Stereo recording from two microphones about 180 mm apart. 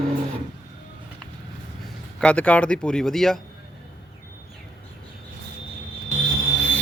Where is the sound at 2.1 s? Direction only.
5° left (ahead or behind).